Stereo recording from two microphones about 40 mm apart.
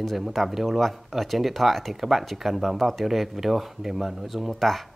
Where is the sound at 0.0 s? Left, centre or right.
Centre.